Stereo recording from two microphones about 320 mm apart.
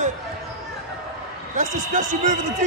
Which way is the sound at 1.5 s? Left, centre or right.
Right.